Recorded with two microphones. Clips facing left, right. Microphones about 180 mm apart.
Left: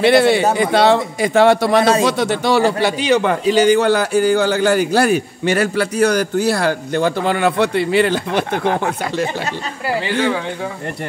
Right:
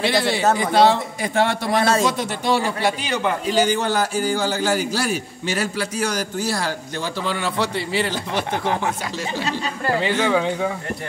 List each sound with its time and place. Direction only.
0.0 s a man's voice: 60° left (ahead or behind)
0.6 s a man's voice: 70° left (ahead or behind); by 1.8 s 90° left
2.0 s a man's voice: 75° left (ahead or behind); by 9.3 s 60° left (ahead or behind)